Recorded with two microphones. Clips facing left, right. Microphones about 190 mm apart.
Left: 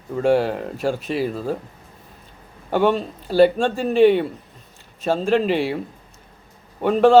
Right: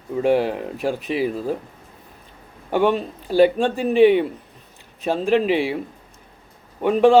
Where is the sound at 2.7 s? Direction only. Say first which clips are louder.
Even; 15° right (ahead or behind).